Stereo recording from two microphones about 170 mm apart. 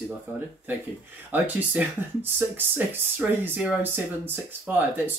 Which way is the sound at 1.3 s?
10° right (ahead or behind).